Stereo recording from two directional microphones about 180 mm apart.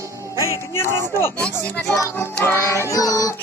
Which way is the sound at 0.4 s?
15° left (ahead or behind).